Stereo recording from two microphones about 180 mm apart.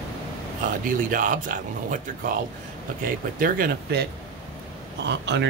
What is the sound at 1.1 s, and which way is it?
Speech, 50° right (ahead or behind).